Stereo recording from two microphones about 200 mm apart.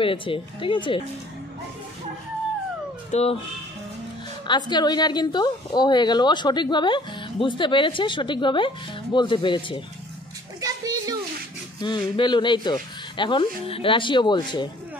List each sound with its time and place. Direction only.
0.0 s a woman's voice: 25° left (ahead or behind)
3.1 s speech: 30° left (ahead or behind)
4.5 s a woman's voice: 20° left (ahead or behind)
10.6 s a sound: 20° right (ahead or behind)
11.8 s a woman's voice: 20° left (ahead or behind)